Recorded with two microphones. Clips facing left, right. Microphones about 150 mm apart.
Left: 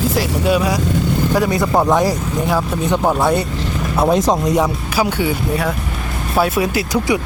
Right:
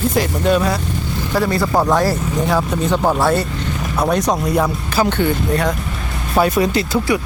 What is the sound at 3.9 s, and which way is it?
Speech, 25° left (ahead or behind).